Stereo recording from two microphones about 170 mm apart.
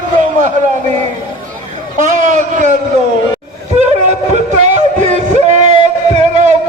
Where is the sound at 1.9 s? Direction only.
45° right (ahead or behind).